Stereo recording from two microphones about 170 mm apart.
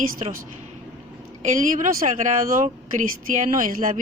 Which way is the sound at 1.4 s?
50° right (ahead or behind).